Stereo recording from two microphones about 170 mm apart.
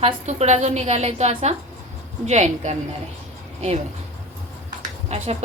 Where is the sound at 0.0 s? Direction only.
40° right (ahead or behind).